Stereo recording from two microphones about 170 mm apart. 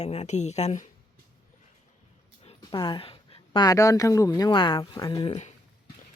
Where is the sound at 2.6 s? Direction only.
25° left (ahead or behind).